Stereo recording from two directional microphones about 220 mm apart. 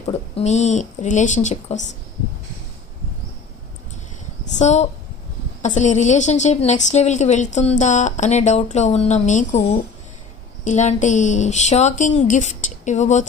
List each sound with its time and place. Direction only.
0.1 s a woman's voice: 30° left (ahead or behind)
4.5 s a woman's voice: 30° left (ahead or behind)